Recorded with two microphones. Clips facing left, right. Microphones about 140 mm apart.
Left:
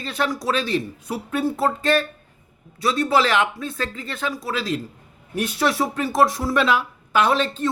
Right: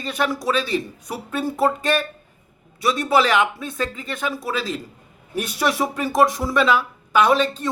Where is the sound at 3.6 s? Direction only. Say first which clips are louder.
Right 2 dB; 15° right (ahead or behind).